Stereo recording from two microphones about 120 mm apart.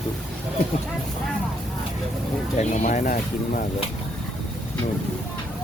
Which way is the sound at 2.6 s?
85° left.